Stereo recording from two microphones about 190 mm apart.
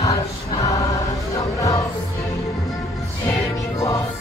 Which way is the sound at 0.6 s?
20° left (ahead or behind).